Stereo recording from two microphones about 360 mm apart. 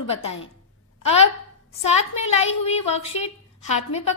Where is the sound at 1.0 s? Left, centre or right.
Centre.